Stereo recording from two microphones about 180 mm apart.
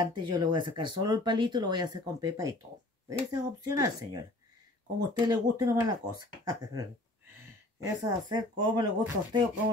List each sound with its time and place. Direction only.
0.0 s speech: 25° right (ahead or behind)